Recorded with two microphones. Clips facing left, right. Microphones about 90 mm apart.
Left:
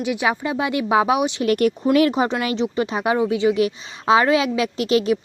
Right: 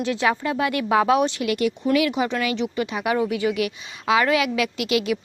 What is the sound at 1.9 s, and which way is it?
A woman's voice, 40° left (ahead or behind).